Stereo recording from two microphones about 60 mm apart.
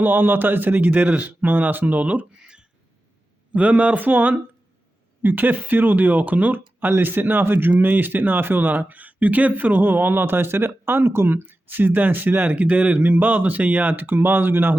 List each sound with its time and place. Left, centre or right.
0.0 s a man's voice: right